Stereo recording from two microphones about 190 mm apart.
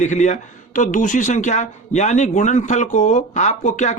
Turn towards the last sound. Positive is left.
turn(degrees=40)  # may be behind; listen again after turning